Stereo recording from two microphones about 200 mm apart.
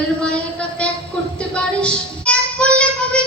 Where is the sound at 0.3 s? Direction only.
5° left (ahead or behind).